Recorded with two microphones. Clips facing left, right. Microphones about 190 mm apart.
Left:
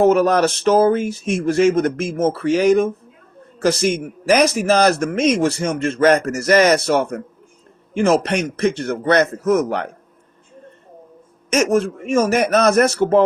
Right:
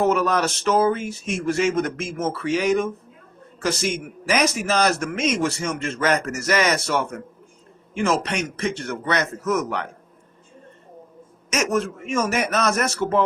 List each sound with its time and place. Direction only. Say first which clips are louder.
0.0 s speech: left 6 dB; 40° left (ahead or behind)
11.5 s speech: left 6 dB; 35° left (ahead or behind)